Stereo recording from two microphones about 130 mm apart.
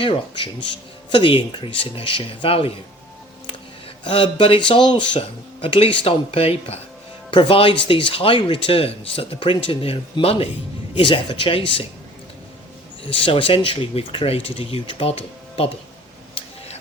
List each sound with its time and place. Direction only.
0.0 s speech: 40° left (ahead or behind)
4.0 s speech: 40° left (ahead or behind)
13.2 s speech: 45° left (ahead or behind)